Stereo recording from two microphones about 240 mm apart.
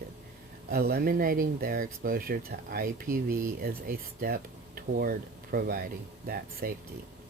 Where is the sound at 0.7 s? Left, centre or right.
Right.